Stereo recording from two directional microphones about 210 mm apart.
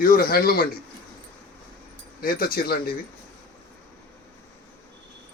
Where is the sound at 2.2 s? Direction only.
45° left (ahead or behind).